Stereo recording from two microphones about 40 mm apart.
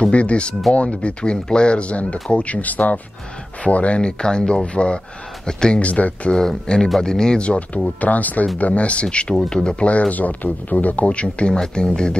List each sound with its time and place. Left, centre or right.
0.1 s speech: left
5.8 s speech: left
6.3 s speech: centre
7.4 s speech: left
9.0 s speech: left
9.8 s speech: left; by 12.2 s centre